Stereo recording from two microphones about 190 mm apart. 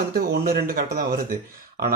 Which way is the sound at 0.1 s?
50° right (ahead or behind).